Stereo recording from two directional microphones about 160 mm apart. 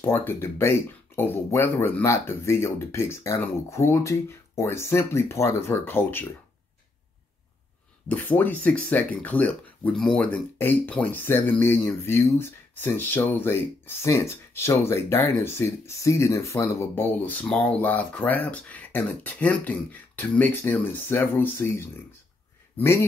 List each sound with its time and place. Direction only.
0.0 s speech: 15° left (ahead or behind)
8.1 s speech: 10° left (ahead or behind)